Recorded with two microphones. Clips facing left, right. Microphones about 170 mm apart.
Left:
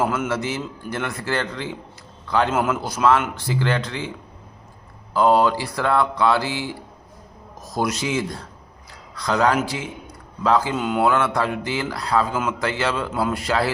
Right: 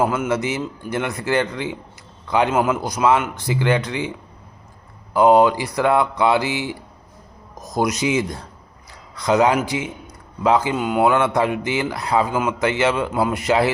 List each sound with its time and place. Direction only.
0.0 s a man's voice: 15° right (ahead or behind)
5.1 s a man's voice: 20° right (ahead or behind)
10.8 s a man's voice: 5° right (ahead or behind)
11.0 s a man's voice: 20° right (ahead or behind)